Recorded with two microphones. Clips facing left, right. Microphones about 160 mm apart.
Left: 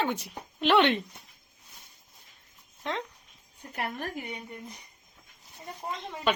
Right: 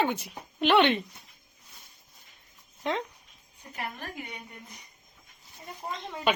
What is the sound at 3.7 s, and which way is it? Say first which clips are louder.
Speech: left 3 dB; 60° left (ahead or behind).